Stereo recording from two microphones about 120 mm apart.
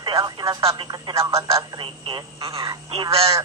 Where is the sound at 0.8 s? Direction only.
35° right (ahead or behind).